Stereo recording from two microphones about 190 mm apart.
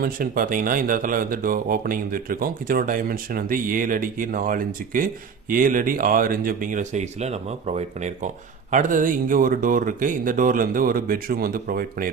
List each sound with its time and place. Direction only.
0.0 s speech: 45° right (ahead or behind)